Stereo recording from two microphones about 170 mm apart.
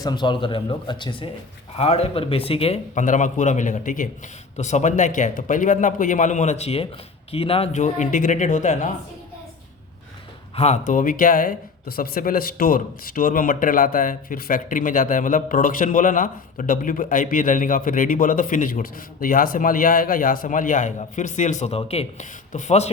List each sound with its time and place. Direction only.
0.0 s speech: 25° left (ahead or behind); by 8.9 s 45° left (ahead or behind)
10.5 s speech: 40° left (ahead or behind)
10.8 s speech: 50° left (ahead or behind)